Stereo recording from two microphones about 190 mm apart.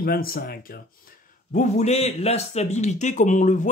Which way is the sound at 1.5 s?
40° left (ahead or behind).